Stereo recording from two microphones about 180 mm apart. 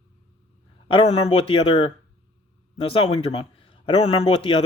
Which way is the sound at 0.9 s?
30° left (ahead or behind).